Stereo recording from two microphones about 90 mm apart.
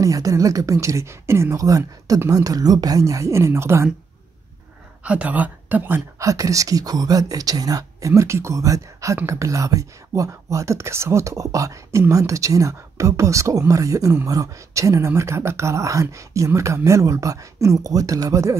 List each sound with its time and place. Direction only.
0.0 s speech: 40° right (ahead or behind)
5.0 s speech: 15° right (ahead or behind)
6.1 s speech: 35° right (ahead or behind)